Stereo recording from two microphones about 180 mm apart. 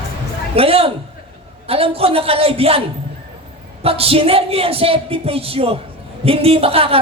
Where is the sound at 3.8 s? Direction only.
30° right (ahead or behind).